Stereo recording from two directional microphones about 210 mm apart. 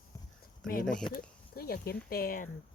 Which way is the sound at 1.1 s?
45° left (ahead or behind).